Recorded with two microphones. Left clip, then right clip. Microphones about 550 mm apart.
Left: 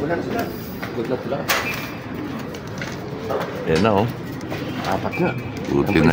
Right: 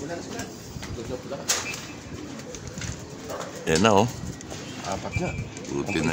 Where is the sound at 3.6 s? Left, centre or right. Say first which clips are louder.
Left 1 dB; right.